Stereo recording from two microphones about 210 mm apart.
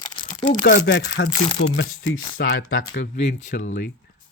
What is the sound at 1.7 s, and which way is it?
Speech, 65° left (ahead or behind).